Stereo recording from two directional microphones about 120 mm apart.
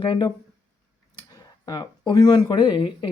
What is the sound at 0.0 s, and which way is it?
Speech, 40° left (ahead or behind).